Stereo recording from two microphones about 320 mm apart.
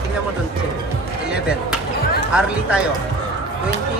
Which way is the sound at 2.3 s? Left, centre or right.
Centre.